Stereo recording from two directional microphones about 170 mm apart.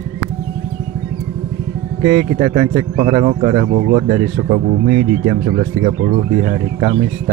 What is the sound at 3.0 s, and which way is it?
Speech, 40° right (ahead or behind).